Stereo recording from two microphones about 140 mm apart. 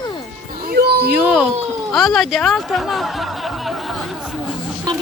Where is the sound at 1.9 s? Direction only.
Centre (ahead or behind).